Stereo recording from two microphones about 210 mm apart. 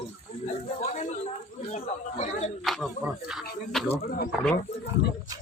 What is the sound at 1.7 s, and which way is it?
Chatter, 35° left (ahead or behind).